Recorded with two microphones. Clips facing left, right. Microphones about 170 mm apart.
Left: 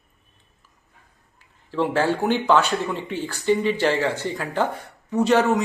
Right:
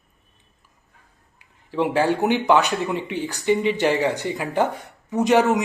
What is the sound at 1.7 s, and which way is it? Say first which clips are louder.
A man's voice: right 1 dB; 15° right (ahead or behind).